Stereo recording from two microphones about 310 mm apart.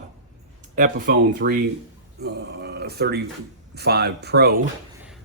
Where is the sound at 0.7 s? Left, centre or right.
Right.